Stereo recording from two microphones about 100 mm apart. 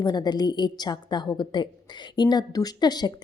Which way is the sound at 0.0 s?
45° left (ahead or behind).